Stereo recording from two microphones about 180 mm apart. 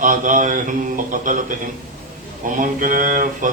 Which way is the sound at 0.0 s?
45° right (ahead or behind).